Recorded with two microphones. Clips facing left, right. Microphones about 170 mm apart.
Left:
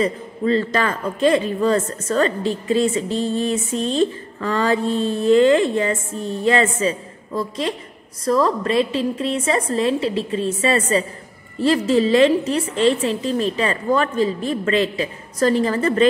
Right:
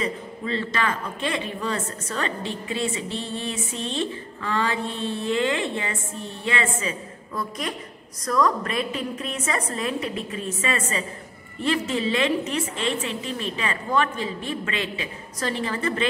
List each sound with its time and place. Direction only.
0.0 s a woman's voice: 40° left (ahead or behind)